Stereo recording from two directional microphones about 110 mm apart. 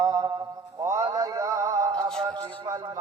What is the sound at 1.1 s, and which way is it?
Music, 30° right (ahead or behind).